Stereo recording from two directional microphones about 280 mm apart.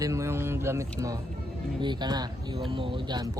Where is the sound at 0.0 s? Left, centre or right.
Centre.